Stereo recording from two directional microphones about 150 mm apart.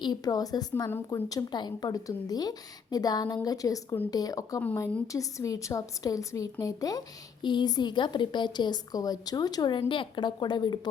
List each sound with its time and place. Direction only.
0.0 s a woman's voice: 25° left (ahead or behind)